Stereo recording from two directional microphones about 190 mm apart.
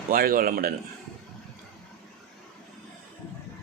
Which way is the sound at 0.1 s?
50° right (ahead or behind).